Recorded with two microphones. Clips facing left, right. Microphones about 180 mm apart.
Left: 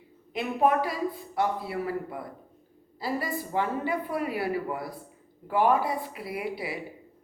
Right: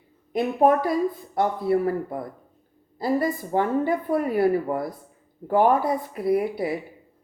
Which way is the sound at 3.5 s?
45° right (ahead or behind).